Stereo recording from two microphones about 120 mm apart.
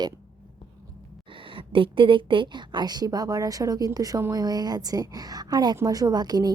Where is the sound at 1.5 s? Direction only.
45° right (ahead or behind).